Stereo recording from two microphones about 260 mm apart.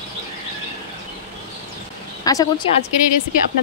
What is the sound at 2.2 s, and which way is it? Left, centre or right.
Speech, centre.